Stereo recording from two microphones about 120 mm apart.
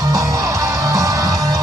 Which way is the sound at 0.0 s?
30° right (ahead or behind).